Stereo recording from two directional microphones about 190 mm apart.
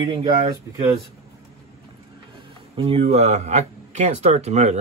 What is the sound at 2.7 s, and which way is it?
Speech, 30° right (ahead or behind).